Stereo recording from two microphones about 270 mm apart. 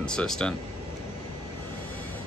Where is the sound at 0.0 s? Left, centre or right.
Centre.